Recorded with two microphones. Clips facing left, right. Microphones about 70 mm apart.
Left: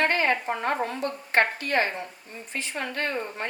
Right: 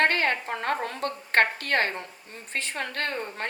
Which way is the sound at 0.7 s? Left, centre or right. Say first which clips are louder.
Right 1 dB; right.